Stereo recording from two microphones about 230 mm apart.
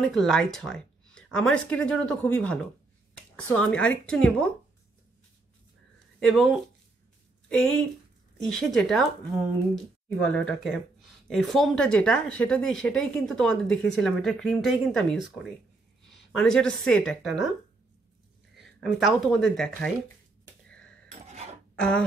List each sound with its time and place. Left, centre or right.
0.2 s speech: centre
6.1 s a woman's voice: centre
18.5 s speech: centre
21.3 s a sound: right
21.7 s throat clearing: centre